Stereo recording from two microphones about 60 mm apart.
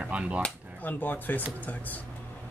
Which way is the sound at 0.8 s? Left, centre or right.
Left.